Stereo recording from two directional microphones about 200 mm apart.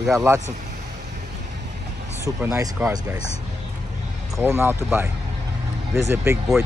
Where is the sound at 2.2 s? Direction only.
15° right (ahead or behind).